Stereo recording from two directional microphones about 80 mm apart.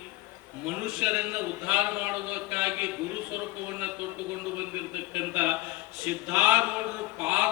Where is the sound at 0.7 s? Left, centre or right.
Right.